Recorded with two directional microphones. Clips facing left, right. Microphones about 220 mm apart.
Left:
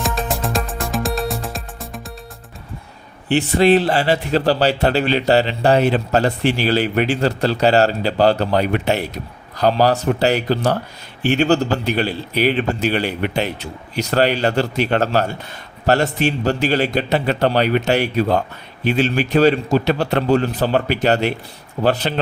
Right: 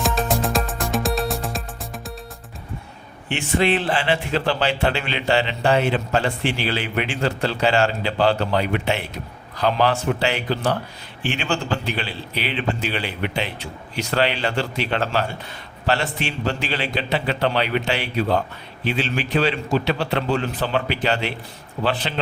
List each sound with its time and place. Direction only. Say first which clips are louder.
0.0 s music: right 1 dB; centre (ahead or behind)
3.2 s a man's voice: left 6 dB; 35° left (ahead or behind)